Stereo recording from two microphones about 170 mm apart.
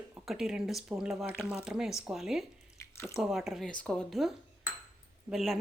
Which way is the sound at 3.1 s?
Centre (ahead or behind).